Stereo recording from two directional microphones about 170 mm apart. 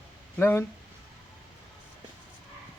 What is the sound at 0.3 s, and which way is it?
Speech, 15° left (ahead or behind).